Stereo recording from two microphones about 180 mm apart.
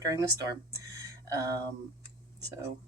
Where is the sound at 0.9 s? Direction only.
15° right (ahead or behind).